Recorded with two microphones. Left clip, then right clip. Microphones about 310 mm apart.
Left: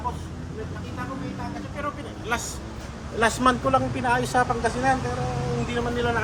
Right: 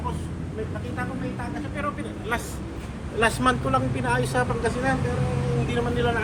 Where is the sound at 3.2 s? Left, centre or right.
Left.